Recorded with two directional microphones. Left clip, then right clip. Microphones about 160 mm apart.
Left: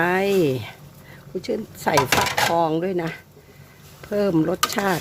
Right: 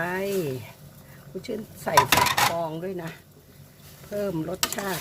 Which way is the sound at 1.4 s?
45° left (ahead or behind).